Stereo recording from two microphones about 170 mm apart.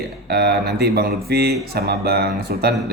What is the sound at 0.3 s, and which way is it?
A man's voice, 70° right (ahead or behind).